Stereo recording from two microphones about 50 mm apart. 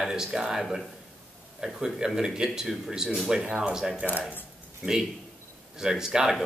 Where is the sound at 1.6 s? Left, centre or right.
Centre.